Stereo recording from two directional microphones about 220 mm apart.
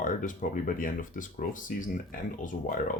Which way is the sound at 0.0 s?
35° left (ahead or behind).